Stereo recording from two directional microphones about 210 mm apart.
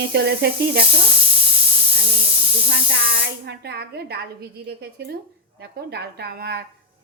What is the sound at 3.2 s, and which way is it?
Speech, 50° right (ahead or behind).